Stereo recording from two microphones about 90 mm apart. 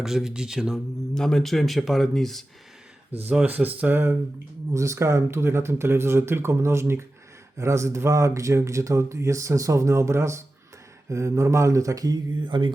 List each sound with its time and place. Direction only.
0.0 s speech: 5° right (ahead or behind)
1.1 s speech: 5° left (ahead or behind)
3.4 s speech: 20° right (ahead or behind)
4.7 s speech: 35° right (ahead or behind)
12.4 s mantra: 60° right (ahead or behind)